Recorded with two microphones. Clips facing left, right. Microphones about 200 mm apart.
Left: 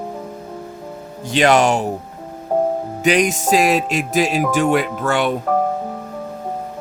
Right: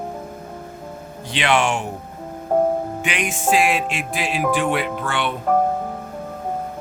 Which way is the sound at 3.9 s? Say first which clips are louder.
Left 7 dB; 40° left (ahead or behind).